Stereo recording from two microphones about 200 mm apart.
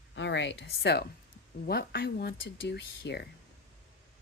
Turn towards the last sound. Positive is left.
turn(degrees=55)  # may be behind; listen again after turning